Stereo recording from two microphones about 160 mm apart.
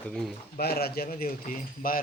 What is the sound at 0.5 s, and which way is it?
Speech, 75° left (ahead or behind).